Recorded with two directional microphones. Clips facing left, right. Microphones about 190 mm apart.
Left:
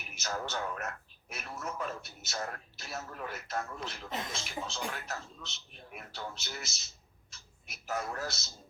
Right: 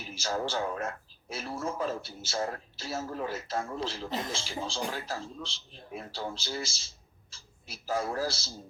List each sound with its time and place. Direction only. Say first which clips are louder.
0.0 s a man's voice: right 6 dB; 30° right (ahead or behind)